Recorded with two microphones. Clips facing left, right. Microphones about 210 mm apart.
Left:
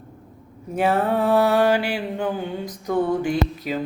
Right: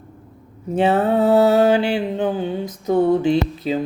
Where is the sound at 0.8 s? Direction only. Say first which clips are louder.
Right 4 dB; 25° right (ahead or behind).